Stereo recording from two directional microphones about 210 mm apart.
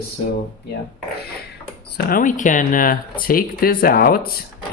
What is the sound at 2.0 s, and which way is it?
Speech, 45° left (ahead or behind).